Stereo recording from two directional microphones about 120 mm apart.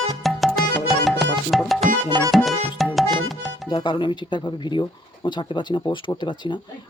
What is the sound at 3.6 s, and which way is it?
Speech, 35° left (ahead or behind).